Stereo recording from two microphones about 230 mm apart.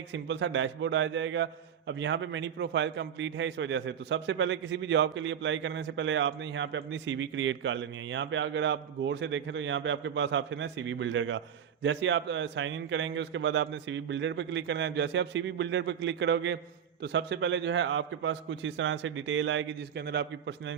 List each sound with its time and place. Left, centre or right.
0.1 s a man's voice: right